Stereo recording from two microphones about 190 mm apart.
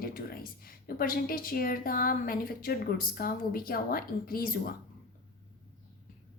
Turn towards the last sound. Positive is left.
turn(degrees=50)  # may be behind; listen again after turning